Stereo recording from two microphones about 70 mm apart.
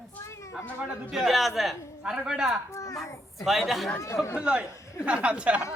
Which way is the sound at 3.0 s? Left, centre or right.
Centre.